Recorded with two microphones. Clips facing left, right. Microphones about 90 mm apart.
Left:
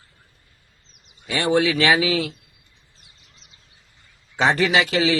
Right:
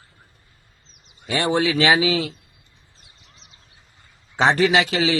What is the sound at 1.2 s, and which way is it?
A man's voice, 30° right (ahead or behind).